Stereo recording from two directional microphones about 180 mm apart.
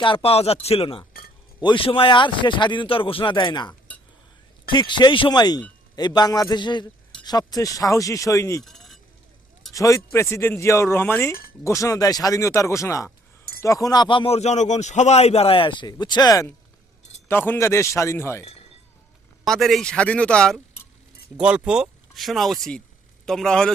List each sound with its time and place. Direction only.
0.0 s speech: 30° left (ahead or behind)
3.7 s chink: 10° left (ahead or behind)
4.7 s speech: 25° left (ahead or behind)
8.6 s a sound: centre (ahead or behind)
9.7 s speech: 15° left (ahead or behind)
19.5 s speech: centre (ahead or behind)
21.3 s speech: 5° right (ahead or behind)